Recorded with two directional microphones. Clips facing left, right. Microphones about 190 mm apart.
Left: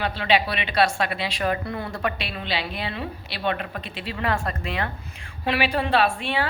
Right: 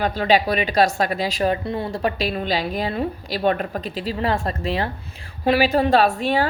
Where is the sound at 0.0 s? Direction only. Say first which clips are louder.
Right 4 dB; 40° right (ahead or behind).